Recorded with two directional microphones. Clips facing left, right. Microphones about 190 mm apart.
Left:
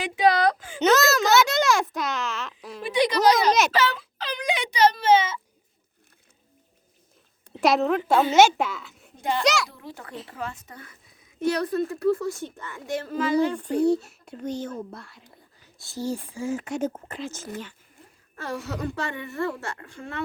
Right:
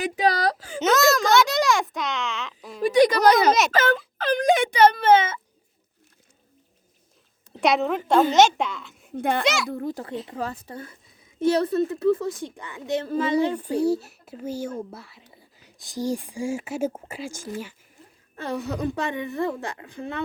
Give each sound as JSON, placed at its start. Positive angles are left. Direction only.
{"t": 0.0, "sound": "whimper", "side_deg": -40}
{"t": 0.8, "sound": "a sound", "side_deg": 0}
{"t": 2.8, "sound": "speech", "side_deg": -45}
{"t": 3.7, "sound": "a sound", "side_deg": -50}
{"t": 7.6, "sound": "speech", "side_deg": 0}
{"t": 9.1, "sound": "a child's voice", "side_deg": -55}
{"t": 9.4, "sound": "speech", "side_deg": 0}
{"t": 9.6, "sound": "speech", "side_deg": -50}
{"t": 9.9, "sound": "a woman's voice", "side_deg": -30}
{"t": 13.6, "sound": "speech", "side_deg": -10}
{"t": 15.8, "sound": "a woman's voice", "side_deg": -15}